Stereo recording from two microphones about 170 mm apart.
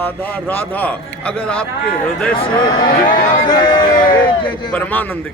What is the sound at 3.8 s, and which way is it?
Speech, 55° left (ahead or behind).